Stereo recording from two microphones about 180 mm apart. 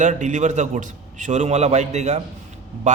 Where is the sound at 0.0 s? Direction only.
40° right (ahead or behind).